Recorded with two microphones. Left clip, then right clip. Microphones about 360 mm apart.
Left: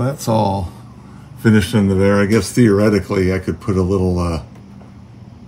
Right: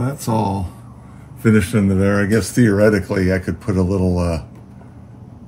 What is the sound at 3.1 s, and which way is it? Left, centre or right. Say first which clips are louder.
Speech: left 1 dB; centre.